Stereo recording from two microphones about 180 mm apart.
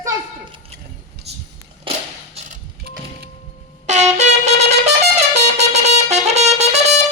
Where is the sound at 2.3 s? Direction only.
40° right (ahead or behind).